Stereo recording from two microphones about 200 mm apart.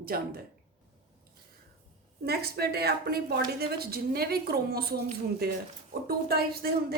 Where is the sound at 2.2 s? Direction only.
50° right (ahead or behind).